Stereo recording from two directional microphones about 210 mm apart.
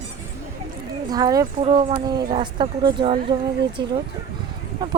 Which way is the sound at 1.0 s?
20° right (ahead or behind).